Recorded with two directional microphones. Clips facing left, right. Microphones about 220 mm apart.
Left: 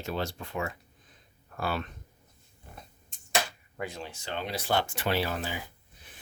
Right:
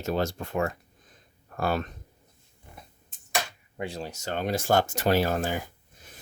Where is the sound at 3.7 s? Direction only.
30° right (ahead or behind).